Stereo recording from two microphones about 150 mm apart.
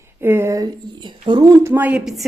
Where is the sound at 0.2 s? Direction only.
15° right (ahead or behind).